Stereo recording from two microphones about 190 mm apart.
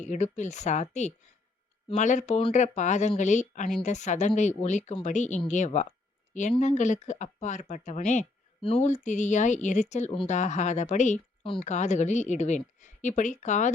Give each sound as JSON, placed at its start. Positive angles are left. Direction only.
{"t": 0.0, "sound": "speech", "side_deg": 40}